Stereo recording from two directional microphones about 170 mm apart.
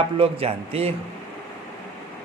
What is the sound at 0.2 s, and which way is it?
Speech, 35° right (ahead or behind).